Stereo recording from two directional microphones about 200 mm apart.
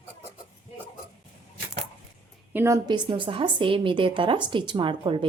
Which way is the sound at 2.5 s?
15° right (ahead or behind).